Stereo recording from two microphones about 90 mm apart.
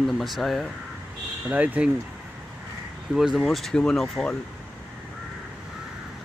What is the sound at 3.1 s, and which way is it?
Speech, 5° right (ahead or behind).